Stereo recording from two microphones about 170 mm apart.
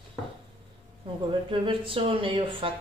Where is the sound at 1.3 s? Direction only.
30° right (ahead or behind).